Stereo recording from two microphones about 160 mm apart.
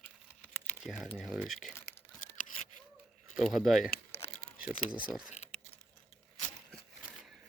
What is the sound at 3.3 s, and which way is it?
Speech, centre (ahead or behind).